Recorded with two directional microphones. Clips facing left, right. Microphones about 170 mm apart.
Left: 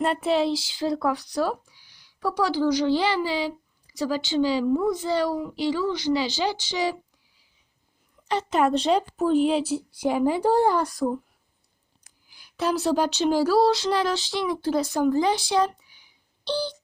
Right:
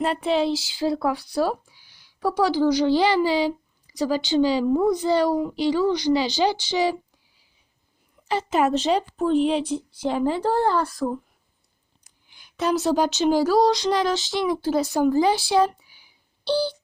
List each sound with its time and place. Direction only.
0.0 s a woman's voice: centre (ahead or behind); by 4.6 s 15° right (ahead or behind)
4.7 s a child's voice: 40° right (ahead or behind)
4.9 s a woman's voice: 15° right (ahead or behind)
8.3 s a woman's voice: 5° right (ahead or behind); by 11.2 s 15° left (ahead or behind)
12.3 s speech: centre (ahead or behind)